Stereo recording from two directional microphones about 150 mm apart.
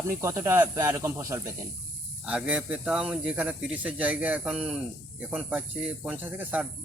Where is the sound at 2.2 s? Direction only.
5° right (ahead or behind).